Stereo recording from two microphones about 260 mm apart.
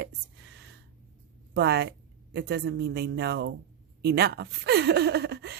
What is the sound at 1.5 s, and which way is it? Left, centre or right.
Speech, right.